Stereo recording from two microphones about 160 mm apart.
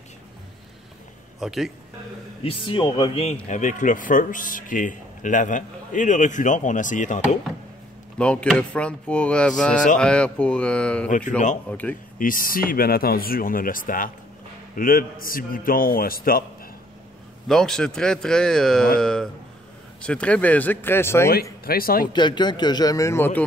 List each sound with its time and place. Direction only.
1.4 s speech: centre (ahead or behind)
2.4 s speech: 30° left (ahead or behind)
3.4 s a man's voice: 50° left (ahead or behind)
8.2 s speech: 5° left (ahead or behind)
11.1 s a man's voice: 55° left (ahead or behind)
11.7 s speech: 10° left (ahead or behind)
12.2 s speech: 60° left (ahead or behind)
17.5 s speech: 5° left (ahead or behind)
21.3 s speech: 70° left (ahead or behind)
22.0 s speech: 30° left (ahead or behind)